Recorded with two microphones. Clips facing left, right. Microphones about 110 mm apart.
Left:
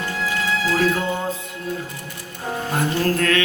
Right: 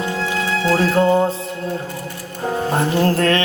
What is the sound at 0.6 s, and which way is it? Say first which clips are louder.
Music: right 6 dB; 30° right (ahead or behind).